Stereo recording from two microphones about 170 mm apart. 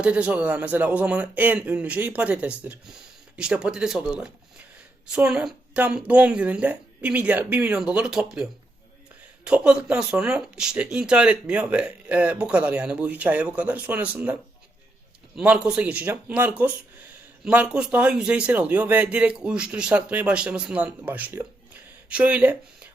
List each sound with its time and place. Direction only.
0.0 s speech: 5° right (ahead or behind)
15.4 s speech: 5° right (ahead or behind)